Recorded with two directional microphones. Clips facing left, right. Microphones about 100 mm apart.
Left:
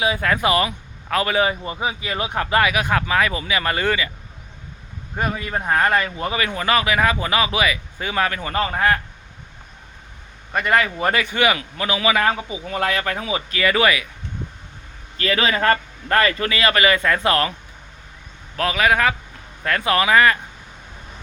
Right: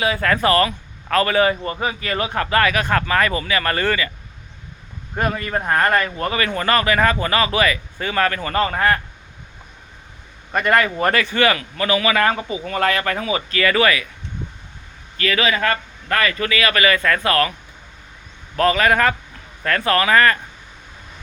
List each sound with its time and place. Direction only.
0.0 s a man's voice: 10° left (ahead or behind)
5.1 s a man's voice: 5° left (ahead or behind)
10.5 s speech: 5° left (ahead or behind)
11.1 s a man's voice: 15° left (ahead or behind)
15.2 s a man's voice: 30° left (ahead or behind)
18.5 s a man's voice: 5° left (ahead or behind)